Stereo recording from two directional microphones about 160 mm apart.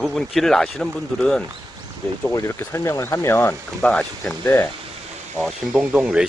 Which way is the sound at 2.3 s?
15° left (ahead or behind).